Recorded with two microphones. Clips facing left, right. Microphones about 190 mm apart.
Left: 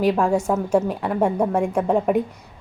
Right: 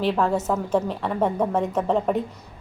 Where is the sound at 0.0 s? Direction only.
10° left (ahead or behind).